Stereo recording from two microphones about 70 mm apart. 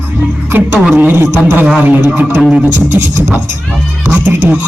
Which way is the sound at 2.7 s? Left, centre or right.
Right.